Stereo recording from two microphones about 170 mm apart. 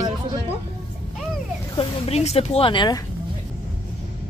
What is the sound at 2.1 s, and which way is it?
Speech, 35° left (ahead or behind).